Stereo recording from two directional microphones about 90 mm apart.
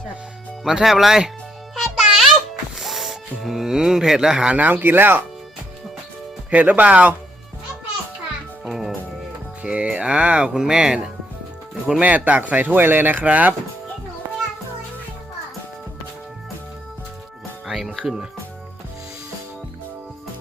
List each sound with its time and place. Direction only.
0.6 s speech: 5° right (ahead or behind)
1.7 s music: 5° right (ahead or behind)
2.7 s speech: centre (ahead or behind); by 5.2 s 20° right (ahead or behind)
6.5 s speech: 15° right (ahead or behind)
8.6 s music: centre (ahead or behind)
9.6 s speech: 15° right (ahead or behind)
17.7 s music: centre (ahead or behind)